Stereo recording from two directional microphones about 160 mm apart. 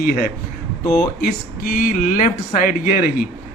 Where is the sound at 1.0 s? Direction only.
65° left (ahead or behind).